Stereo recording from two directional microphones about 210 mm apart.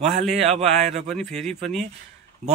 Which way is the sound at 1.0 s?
Centre (ahead or behind).